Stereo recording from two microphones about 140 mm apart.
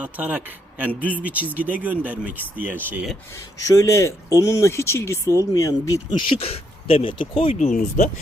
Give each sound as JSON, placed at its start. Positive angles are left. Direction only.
{"t": 0.0, "sound": "speech", "side_deg": -10}
{"t": 3.6, "sound": "speech", "side_deg": 20}
{"t": 7.5, "sound": "speech", "side_deg": 65}